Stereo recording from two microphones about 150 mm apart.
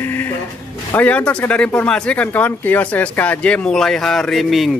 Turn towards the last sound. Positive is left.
turn(degrees=0)  # may be behind; listen again after turning